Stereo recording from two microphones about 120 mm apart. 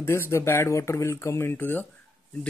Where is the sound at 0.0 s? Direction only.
20° left (ahead or behind).